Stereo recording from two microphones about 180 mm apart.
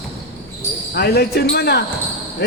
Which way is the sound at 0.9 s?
60° left (ahead or behind).